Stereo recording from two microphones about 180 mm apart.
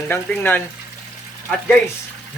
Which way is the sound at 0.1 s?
10° left (ahead or behind).